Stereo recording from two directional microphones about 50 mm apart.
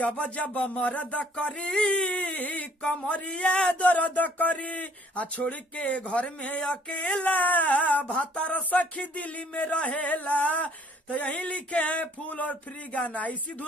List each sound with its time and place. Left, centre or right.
0.0 s speech: left